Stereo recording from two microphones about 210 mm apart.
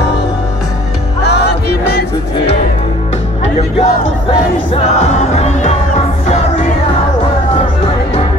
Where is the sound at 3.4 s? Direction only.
30° left (ahead or behind).